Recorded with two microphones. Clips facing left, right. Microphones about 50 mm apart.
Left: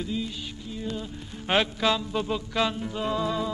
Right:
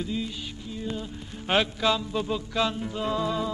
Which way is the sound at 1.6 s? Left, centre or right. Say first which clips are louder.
Even; centre.